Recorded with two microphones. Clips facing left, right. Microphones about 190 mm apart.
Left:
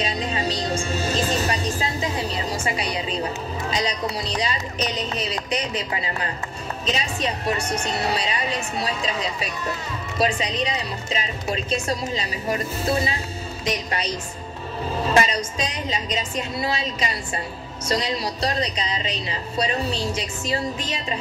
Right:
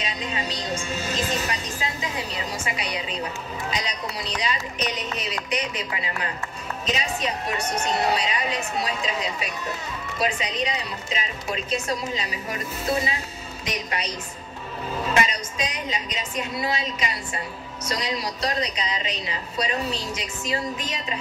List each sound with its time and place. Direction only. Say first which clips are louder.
0.0 s a woman's voice: left 5 dB; 35° left (ahead or behind)